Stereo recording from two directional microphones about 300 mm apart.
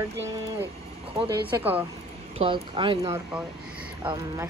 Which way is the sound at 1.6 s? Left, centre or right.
Centre.